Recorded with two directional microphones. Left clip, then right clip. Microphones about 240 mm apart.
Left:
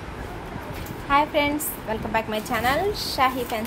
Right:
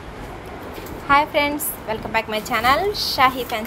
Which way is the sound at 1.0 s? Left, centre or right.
Centre.